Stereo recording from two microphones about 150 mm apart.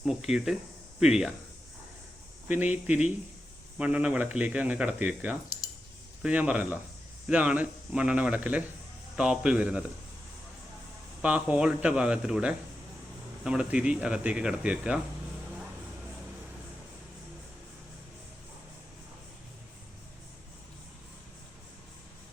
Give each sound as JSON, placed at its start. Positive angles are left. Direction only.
{"t": 0.0, "sound": "speech", "side_deg": -5}
{"t": 2.5, "sound": "speech", "side_deg": -10}
{"t": 5.5, "sound": "a sound", "side_deg": 25}
{"t": 6.2, "sound": "speech", "side_deg": -10}
{"t": 11.2, "sound": "speech", "side_deg": -10}